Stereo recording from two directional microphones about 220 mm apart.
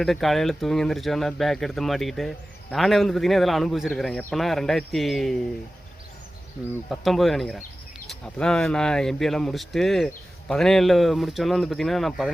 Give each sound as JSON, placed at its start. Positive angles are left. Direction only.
{"t": 0.0, "sound": "speech", "side_deg": 0}
{"t": 6.9, "sound": "speech", "side_deg": 0}